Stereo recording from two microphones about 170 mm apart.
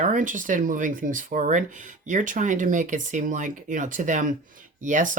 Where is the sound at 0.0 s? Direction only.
50° right (ahead or behind).